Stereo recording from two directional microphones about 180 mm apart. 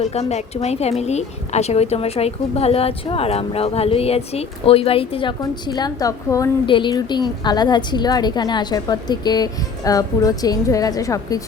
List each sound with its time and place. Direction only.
0.0 s a woman's voice: 35° left (ahead or behind); by 11.4 s 20° left (ahead or behind)